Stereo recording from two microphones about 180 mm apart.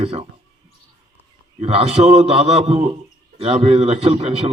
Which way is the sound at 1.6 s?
35° right (ahead or behind).